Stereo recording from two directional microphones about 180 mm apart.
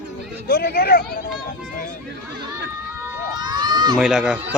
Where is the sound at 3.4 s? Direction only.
25° right (ahead or behind).